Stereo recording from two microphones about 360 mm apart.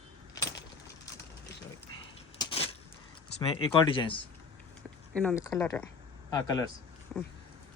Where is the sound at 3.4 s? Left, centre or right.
Centre.